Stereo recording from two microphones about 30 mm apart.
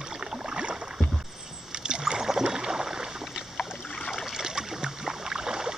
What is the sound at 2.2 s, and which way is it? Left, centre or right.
Boat, centre.